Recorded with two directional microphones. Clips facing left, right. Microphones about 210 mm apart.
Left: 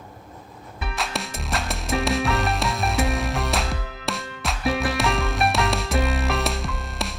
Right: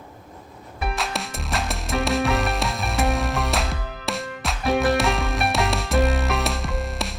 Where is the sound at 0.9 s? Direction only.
Centre (ahead or behind).